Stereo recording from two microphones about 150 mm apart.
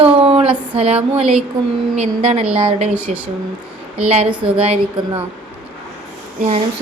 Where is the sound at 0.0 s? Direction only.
40° right (ahead or behind).